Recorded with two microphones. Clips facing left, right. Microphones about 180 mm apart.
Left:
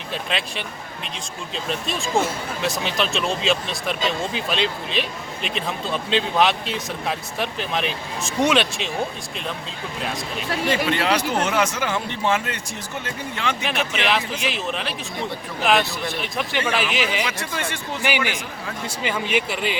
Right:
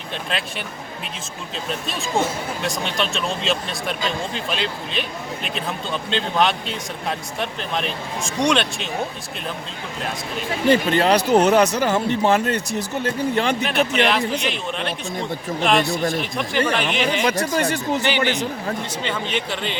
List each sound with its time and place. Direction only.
0.1 s speech: centre (ahead or behind)
10.7 s speech: 35° right (ahead or behind)
13.9 s speech: centre (ahead or behind)
17.2 s speech: 40° right (ahead or behind)
18.0 s speech: 10° left (ahead or behind)